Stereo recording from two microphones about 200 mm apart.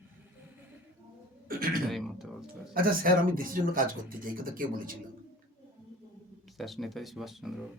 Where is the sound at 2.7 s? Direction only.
45° right (ahead or behind).